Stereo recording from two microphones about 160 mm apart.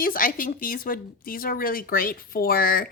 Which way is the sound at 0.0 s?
60° left (ahead or behind).